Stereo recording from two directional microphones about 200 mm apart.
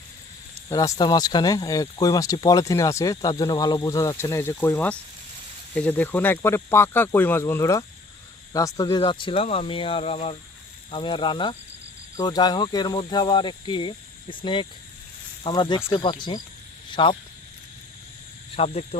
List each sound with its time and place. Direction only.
0.7 s speech: 15° left (ahead or behind)
18.5 s speech: 30° left (ahead or behind)